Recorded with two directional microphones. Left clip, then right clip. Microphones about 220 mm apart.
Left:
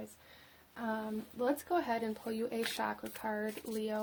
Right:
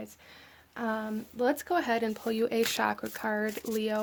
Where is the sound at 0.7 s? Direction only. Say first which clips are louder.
Right 6 dB; 35° right (ahead or behind).